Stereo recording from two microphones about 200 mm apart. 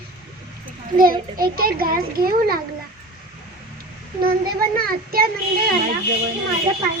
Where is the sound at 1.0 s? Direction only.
45° right (ahead or behind).